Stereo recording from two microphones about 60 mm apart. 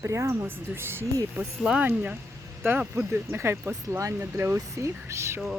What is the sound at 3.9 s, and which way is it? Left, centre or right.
Speech, right.